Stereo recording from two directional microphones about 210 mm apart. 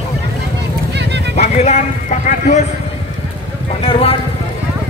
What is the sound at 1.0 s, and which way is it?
Clip-clop, 55° right (ahead or behind).